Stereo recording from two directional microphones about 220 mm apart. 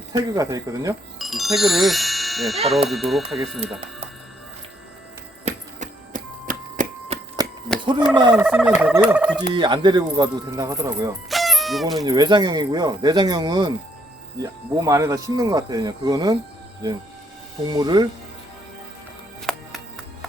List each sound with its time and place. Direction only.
0.2 s speech: 15° right (ahead or behind)
1.2 s speech: centre (ahead or behind)
5.5 s a sound: 35° right (ahead or behind)
7.4 s a sound: 15° right (ahead or behind)
8.1 s speech: 20° right (ahead or behind)
8.4 s speech: 5° right (ahead or behind)
9.5 s speech: 20° right (ahead or behind)
11.3 s music: centre (ahead or behind)
12.0 s speech: 20° right (ahead or behind)
17.7 s speech: 20° right (ahead or behind)
19.5 s music: centre (ahead or behind)